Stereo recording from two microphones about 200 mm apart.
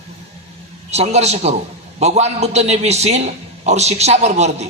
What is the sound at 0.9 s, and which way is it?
A man's voice, 35° right (ahead or behind).